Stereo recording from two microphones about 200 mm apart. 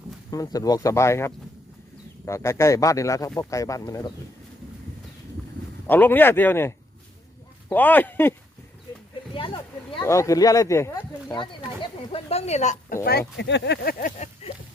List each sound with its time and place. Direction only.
0.3 s speech: 20° left (ahead or behind)
5.9 s speech: 10° left (ahead or behind)
9.3 s speech: 25° left (ahead or behind)
10.0 s speech: 15° left (ahead or behind); by 13.0 s 35° left (ahead or behind)
13.1 s speech: 55° left (ahead or behind)
14.4 s a sound: 30° left (ahead or behind)